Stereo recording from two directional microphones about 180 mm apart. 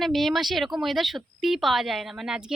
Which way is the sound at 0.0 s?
Centre (ahead or behind).